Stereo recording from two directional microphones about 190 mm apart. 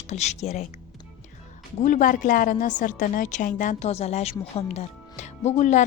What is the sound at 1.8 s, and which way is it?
Speech, 45° left (ahead or behind).